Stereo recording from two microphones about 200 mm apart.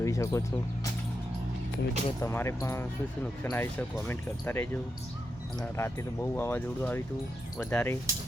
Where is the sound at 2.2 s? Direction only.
15° left (ahead or behind).